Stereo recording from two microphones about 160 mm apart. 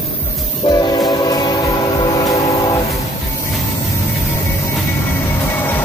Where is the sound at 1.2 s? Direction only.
25° left (ahead or behind).